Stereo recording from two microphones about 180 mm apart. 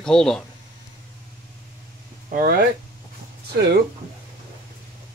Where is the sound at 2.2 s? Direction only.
50° right (ahead or behind).